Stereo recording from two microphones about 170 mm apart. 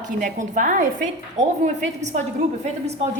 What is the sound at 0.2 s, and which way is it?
A woman's voice, 50° right (ahead or behind).